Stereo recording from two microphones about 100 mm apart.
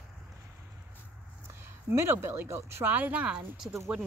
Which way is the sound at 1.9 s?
25° right (ahead or behind).